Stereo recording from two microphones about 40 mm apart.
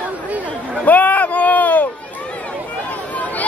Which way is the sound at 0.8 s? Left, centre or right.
Left.